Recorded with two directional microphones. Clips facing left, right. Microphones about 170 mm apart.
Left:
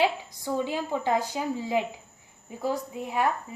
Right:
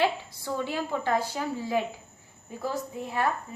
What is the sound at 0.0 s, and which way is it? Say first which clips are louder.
A woman's voice: left 1 dB; 15° left (ahead or behind).